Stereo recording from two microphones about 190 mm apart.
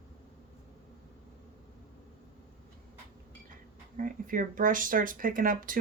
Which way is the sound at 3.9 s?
45° right (ahead or behind).